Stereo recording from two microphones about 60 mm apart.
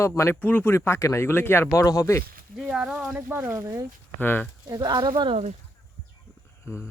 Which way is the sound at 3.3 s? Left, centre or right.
Right.